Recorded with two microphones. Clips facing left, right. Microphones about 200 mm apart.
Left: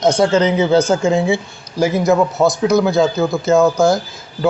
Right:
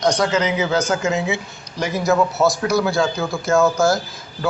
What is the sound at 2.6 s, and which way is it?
A man's voice, 20° left (ahead or behind).